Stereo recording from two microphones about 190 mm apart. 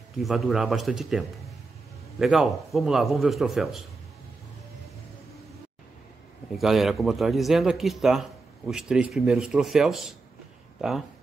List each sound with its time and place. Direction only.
0.1 s a man's voice: centre (ahead or behind)
6.5 s a man's voice: centre (ahead or behind)